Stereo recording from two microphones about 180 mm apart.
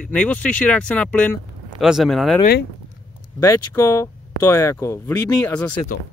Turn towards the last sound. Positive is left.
turn(degrees=10)  # may be behind; listen again after turning